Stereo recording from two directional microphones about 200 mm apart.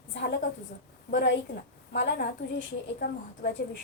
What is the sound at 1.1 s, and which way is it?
A woman's voice, 65° left (ahead or behind).